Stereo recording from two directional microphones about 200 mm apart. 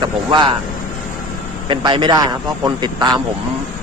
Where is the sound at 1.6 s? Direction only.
25° right (ahead or behind).